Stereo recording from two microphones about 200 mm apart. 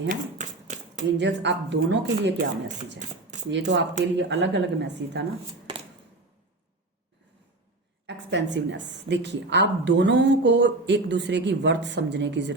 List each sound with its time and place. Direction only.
0.1 s typewriter: 40° right (ahead or behind)
1.2 s a woman's voice: 60° right (ahead or behind)
3.0 s a sound: 35° right (ahead or behind)
3.5 s a woman's voice: 60° right (ahead or behind)
5.7 s a sound: 25° right (ahead or behind)
8.0 s a woman's voice: 60° right (ahead or behind)